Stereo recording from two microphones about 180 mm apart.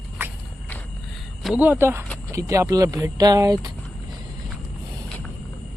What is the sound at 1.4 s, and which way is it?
Speech, 5° right (ahead or behind).